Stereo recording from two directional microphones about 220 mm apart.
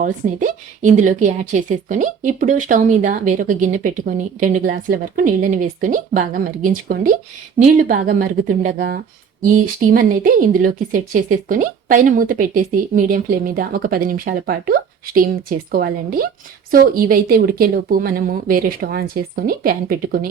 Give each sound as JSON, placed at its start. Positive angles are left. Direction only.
{"t": 0.0, "sound": "a woman's voice", "side_deg": -35}